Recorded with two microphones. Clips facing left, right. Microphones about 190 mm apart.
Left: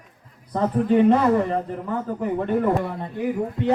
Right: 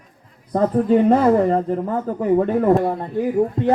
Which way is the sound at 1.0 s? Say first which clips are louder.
Right 3 dB; 45° right (ahead or behind).